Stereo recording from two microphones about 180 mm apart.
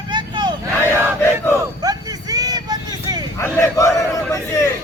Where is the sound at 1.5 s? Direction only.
20° right (ahead or behind).